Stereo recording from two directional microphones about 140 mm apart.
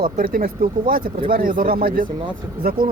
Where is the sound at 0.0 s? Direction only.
90° right.